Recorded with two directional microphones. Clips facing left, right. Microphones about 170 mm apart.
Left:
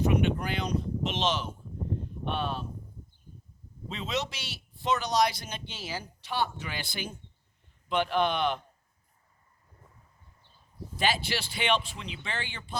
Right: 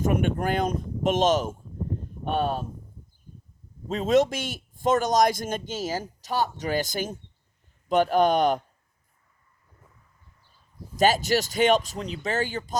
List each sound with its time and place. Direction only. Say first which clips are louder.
0.0 s a man's voice: right 2 dB; 50° right (ahead or behind)
3.8 s a man's voice: right 12 dB; 45° right (ahead or behind)
10.9 s a man's voice: right 9 dB; 45° right (ahead or behind)